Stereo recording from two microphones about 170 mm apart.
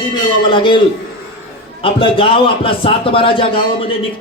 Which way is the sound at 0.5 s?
30° left (ahead or behind).